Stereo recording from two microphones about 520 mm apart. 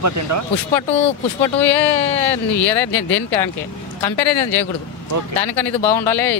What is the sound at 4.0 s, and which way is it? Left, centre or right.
Speech, left.